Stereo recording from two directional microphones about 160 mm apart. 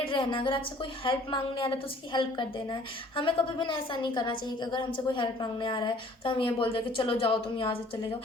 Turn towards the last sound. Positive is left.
turn(degrees=35)  # may be behind; listen again after turning